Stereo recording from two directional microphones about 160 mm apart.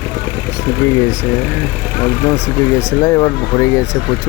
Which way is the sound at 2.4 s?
15° left (ahead or behind).